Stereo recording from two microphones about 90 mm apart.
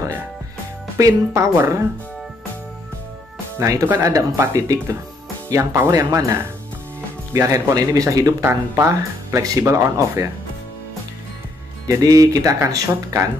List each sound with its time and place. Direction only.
0.9 s speech: 35° right (ahead or behind)
3.5 s speech: 40° right (ahead or behind)
3.8 s speech: 30° right (ahead or behind)
8.5 s speech: 30° right (ahead or behind)
11.9 s speech: 40° right (ahead or behind)
12.5 s speech: 30° right (ahead or behind)